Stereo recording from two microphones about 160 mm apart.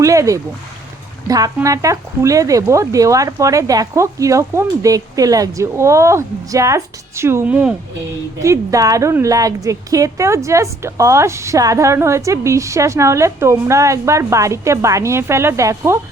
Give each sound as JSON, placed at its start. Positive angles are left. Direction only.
{"t": 0.0, "sound": "speech", "side_deg": -20}
{"t": 1.6, "sound": "a woman's voice", "side_deg": -20}
{"t": 8.4, "sound": "a woman's voice", "side_deg": -20}